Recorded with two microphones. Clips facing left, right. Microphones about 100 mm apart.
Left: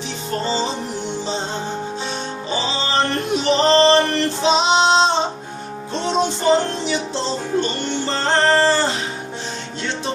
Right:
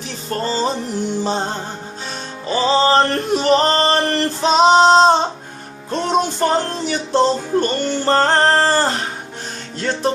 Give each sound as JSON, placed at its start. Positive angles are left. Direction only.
{"t": 0.4, "sound": "music", "side_deg": -45}
{"t": 2.5, "sound": "male singing", "side_deg": -45}
{"t": 5.9, "sound": "music", "side_deg": -50}